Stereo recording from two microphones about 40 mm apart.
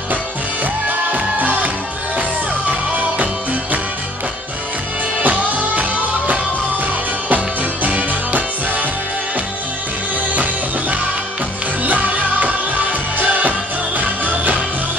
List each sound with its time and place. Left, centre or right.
0.8 s music: right
2.7 s music: right
5.2 s music: right
10.3 s music: right